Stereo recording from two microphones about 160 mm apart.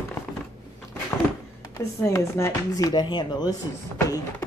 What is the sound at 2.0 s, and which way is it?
Speech, 20° left (ahead or behind).